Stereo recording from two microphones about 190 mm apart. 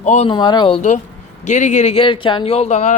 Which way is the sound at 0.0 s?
40° left (ahead or behind).